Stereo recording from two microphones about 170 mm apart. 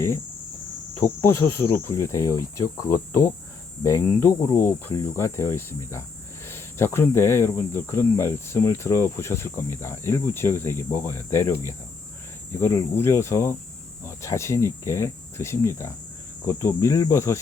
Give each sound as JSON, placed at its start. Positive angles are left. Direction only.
{"t": 0.9, "sound": "speech", "side_deg": 20}
{"t": 14.0, "sound": "cricket", "side_deg": 15}
{"t": 16.5, "sound": "speech", "side_deg": 15}